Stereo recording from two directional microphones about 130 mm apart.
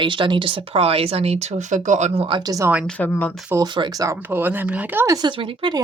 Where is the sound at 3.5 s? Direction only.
35° right (ahead or behind).